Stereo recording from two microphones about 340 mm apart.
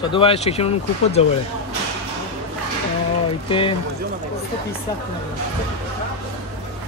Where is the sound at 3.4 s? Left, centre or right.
Centre.